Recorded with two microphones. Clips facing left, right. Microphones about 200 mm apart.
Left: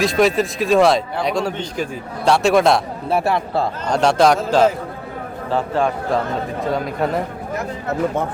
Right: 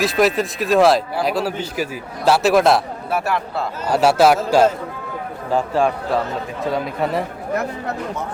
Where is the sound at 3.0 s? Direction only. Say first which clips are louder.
Left 3 dB; 30° left (ahead or behind).